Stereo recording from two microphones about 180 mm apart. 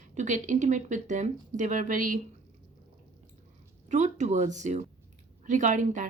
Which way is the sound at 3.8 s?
40° right (ahead or behind).